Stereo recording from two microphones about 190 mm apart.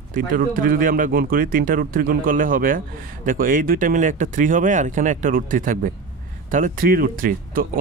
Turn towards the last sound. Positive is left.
turn(degrees=-45)  # may be behind; listen again after turning